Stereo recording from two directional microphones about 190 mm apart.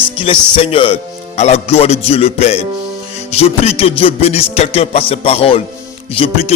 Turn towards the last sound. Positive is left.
turn(degrees=30)  # may be behind; listen again after turning